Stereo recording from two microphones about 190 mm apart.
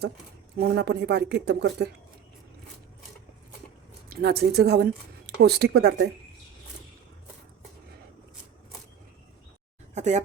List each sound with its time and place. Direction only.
0.6 s speech: 60° right (ahead or behind)
4.1 s speech: 55° right (ahead or behind)
9.9 s speech: 40° right (ahead or behind)